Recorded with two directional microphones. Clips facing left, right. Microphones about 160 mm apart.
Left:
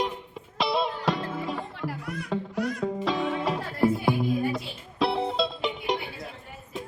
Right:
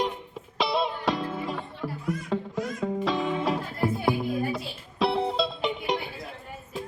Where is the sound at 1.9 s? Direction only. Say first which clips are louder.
Right 3 dB; 70° left (ahead or behind).